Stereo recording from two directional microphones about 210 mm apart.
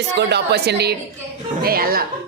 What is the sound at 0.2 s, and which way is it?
Speech, 55° right (ahead or behind).